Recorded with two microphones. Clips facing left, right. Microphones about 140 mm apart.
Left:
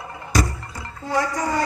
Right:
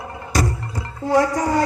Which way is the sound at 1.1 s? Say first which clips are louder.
Right 5 dB; 55° right (ahead or behind).